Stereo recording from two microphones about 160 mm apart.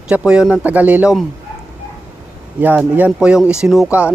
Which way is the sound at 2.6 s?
10° right (ahead or behind).